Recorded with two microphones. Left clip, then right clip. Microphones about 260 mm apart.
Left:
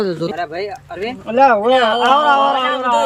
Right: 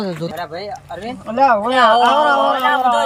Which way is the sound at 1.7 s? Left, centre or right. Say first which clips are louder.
Right 1 dB; centre.